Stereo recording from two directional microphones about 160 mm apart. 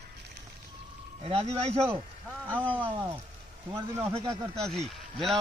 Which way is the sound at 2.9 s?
30° right (ahead or behind).